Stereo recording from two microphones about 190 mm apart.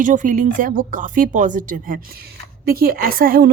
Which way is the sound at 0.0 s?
40° right (ahead or behind).